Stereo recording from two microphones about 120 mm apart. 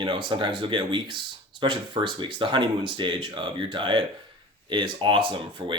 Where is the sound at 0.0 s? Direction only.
40° right (ahead or behind).